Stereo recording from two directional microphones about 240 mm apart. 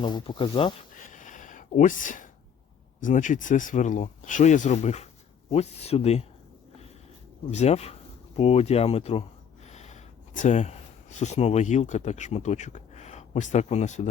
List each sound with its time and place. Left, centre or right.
0.0 s speech: centre
0.9 s a sound: left
3.0 s speech: left
7.5 s speech: left